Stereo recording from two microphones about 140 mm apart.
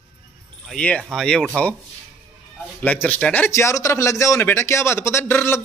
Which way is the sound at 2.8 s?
10° left (ahead or behind).